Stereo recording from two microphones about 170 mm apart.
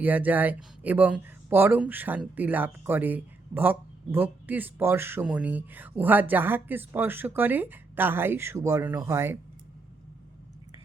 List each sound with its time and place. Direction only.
0.0 s speech: 10° right (ahead or behind)